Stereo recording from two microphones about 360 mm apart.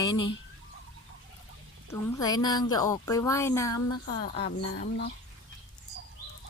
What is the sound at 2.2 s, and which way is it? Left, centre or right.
Speech, centre.